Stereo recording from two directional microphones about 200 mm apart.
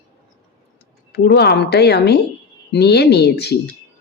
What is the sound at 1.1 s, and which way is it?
Speech, 55° left (ahead or behind).